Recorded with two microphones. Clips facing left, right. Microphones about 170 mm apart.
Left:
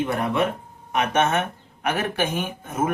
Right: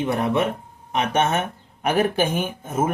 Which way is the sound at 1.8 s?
30° right (ahead or behind).